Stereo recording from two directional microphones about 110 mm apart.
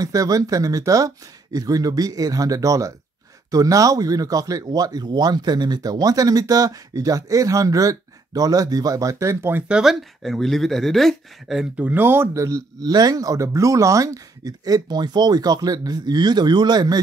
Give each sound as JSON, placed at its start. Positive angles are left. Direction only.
{"t": 0.0, "sound": "speech", "side_deg": -35}
{"t": 9.8, "sound": "speech", "side_deg": 0}
{"t": 11.7, "sound": "speech", "side_deg": -15}